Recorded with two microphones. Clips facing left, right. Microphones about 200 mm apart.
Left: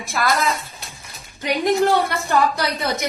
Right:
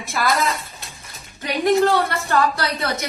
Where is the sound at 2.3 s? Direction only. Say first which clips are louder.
Left 1 dB; 15° left (ahead or behind).